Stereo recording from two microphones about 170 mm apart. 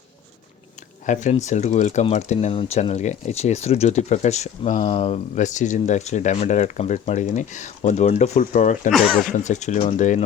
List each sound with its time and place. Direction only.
1.0 s speech: 45° left (ahead or behind)
8.9 s speech: centre (ahead or behind)
9.3 s speech: 45° left (ahead or behind)